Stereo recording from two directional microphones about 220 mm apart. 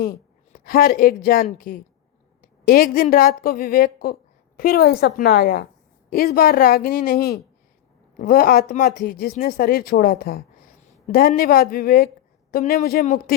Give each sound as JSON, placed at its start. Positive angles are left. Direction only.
{"t": 0.5, "sound": "a woman's voice", "side_deg": 40}